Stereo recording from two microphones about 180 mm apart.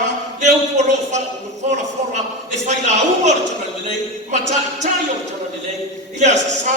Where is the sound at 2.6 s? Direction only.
40° right (ahead or behind).